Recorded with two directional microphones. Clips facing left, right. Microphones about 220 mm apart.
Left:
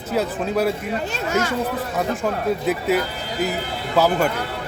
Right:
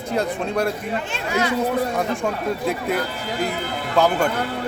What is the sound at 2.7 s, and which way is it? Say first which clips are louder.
Speech: left 3 dB; 5° left (ahead or behind).